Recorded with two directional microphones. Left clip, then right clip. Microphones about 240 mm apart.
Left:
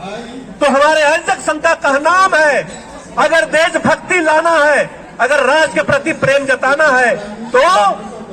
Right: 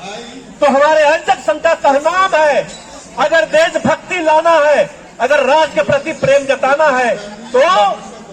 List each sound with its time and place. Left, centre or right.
0.6 s a man's voice: left